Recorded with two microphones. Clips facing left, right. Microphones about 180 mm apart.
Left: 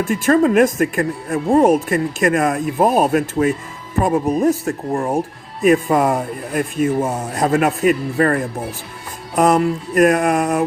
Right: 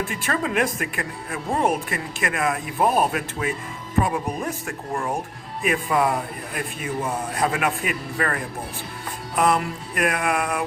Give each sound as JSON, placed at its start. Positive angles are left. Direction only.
{"t": 0.0, "sound": "speech", "side_deg": 45}